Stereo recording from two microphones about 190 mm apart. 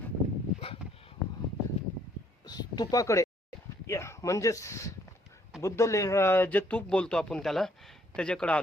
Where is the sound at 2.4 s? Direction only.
20° left (ahead or behind).